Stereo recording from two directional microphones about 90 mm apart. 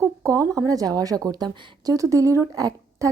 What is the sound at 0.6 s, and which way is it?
Speech, 45° right (ahead or behind).